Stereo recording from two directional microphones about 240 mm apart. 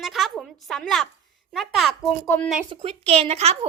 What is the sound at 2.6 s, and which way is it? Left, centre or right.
A woman's voice, right.